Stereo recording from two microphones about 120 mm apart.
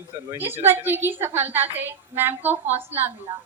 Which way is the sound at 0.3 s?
20° right (ahead or behind).